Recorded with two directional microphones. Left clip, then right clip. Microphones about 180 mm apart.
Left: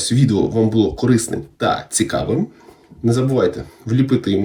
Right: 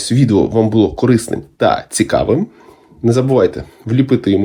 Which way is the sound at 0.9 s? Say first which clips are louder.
Right 4 dB; 15° right (ahead or behind).